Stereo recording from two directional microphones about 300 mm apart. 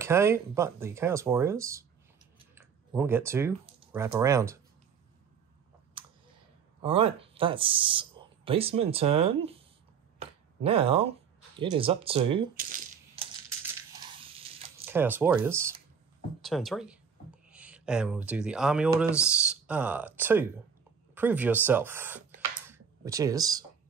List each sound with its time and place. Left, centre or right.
0.0 s speech: centre
2.3 s a sound: centre
3.9 s speech: centre
6.8 s speech: centre
10.1 s a sound: centre
11.6 s speech: centre
12.5 s rattle: right
14.9 s speech: centre
22.7 s a sound: centre